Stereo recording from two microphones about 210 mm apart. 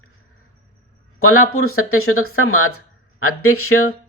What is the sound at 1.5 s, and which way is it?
Speech, 90° left.